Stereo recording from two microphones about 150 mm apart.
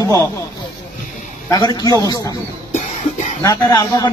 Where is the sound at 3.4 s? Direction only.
25° left (ahead or behind).